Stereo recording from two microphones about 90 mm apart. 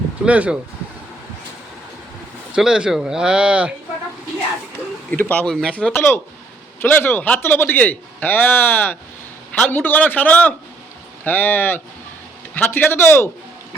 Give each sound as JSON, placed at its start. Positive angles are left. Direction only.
{"t": 0.3, "sound": "speech", "side_deg": -15}
{"t": 2.6, "sound": "speech", "side_deg": -10}
{"t": 5.1, "sound": "a man's voice", "side_deg": 15}
{"t": 5.9, "sound": "a man's voice", "side_deg": 25}